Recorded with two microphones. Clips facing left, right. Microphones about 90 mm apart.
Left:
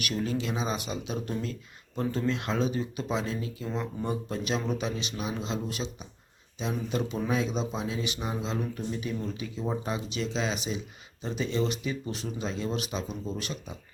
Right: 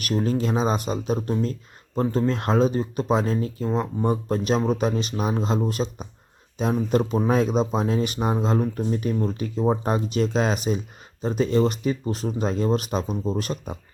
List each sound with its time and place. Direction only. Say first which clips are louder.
0.0 s speech: right 7 dB; 40° right (ahead or behind)